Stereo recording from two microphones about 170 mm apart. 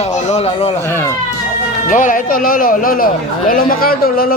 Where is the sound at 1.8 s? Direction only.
50° left (ahead or behind).